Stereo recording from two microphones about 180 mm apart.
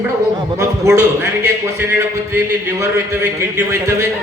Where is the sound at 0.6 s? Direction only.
15° right (ahead or behind).